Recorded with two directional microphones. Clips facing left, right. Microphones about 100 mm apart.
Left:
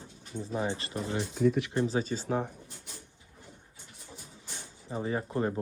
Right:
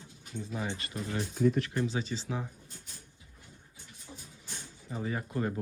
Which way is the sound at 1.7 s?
30° left (ahead or behind).